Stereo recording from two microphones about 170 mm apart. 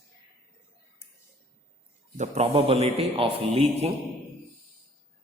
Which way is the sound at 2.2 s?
40° right (ahead or behind).